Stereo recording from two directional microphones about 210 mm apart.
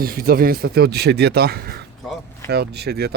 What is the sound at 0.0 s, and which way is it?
Speech, 45° right (ahead or behind).